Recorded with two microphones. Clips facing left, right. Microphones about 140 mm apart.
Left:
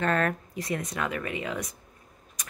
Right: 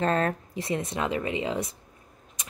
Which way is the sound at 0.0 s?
30° right (ahead or behind).